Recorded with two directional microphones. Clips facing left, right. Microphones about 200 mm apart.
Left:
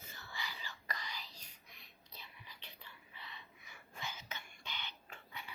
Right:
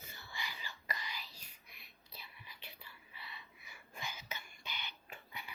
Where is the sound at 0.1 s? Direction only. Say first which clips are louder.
Left 1 dB; 10° right (ahead or behind).